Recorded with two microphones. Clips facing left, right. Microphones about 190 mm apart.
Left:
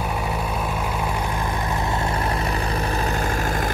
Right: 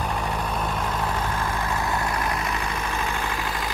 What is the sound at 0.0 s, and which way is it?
Vehicle, 10° left (ahead or behind).